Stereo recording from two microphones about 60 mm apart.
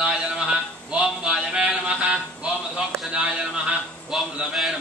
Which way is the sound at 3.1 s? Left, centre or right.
Centre.